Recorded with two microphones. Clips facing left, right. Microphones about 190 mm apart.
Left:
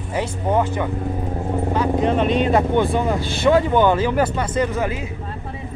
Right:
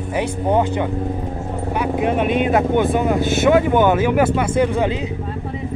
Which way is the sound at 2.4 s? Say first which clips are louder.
Right 1 dB; 10° right (ahead or behind).